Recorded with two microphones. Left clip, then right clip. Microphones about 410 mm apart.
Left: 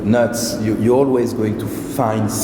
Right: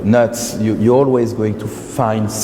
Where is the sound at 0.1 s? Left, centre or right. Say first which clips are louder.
Right 3 dB; right.